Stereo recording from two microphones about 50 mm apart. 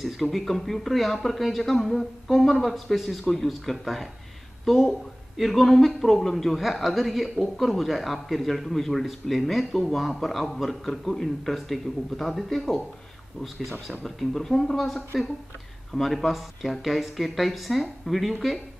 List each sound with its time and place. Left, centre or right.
0.0 s a man's voice: centre